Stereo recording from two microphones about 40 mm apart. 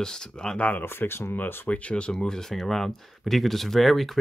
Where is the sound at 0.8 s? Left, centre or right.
Left.